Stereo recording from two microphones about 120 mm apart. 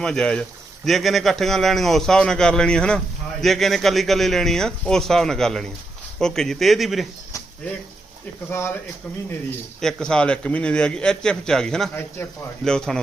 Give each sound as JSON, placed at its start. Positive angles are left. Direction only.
{"t": 0.0, "sound": "a man's voice", "side_deg": 5}
{"t": 8.4, "sound": "speech", "side_deg": 20}
{"t": 9.8, "sound": "a man's voice", "side_deg": 5}